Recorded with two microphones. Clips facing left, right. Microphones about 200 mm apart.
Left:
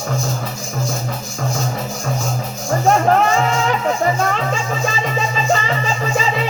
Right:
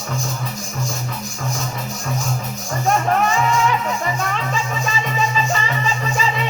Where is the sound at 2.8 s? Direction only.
40° left (ahead or behind).